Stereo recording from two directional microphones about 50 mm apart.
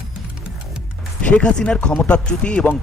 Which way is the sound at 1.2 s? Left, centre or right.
Left.